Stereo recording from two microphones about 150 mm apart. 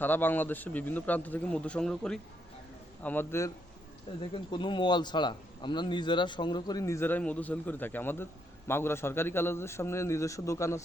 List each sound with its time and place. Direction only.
0.0 s a man's voice: 15° left (ahead or behind)
4.2 s speech: 30° left (ahead or behind)